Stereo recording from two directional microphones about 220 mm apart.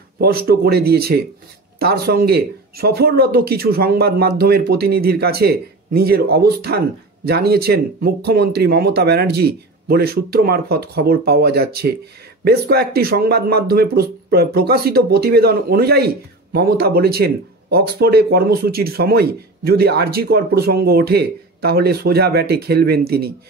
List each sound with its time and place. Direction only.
0.2 s speech: 45° right (ahead or behind)